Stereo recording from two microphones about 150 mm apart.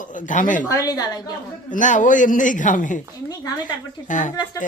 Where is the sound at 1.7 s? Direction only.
60° left (ahead or behind).